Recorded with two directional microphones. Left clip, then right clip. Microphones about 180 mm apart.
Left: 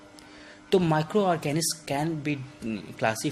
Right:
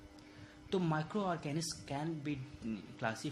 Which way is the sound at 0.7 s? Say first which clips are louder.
Left 13 dB; 35° left (ahead or behind).